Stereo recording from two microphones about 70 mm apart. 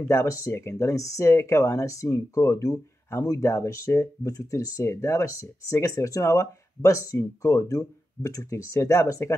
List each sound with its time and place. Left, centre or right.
0.1 s speech: left